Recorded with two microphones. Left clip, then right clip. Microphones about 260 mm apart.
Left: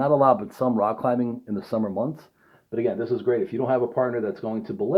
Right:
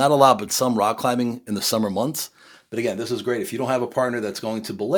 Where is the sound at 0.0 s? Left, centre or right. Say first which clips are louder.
Right 3 dB; right.